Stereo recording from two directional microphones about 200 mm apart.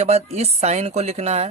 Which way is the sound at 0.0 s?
30° right (ahead or behind).